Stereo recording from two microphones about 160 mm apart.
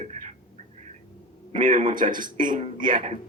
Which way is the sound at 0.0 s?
45° right (ahead or behind).